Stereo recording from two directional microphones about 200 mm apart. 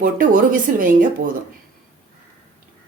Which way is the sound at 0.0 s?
45° right (ahead or behind).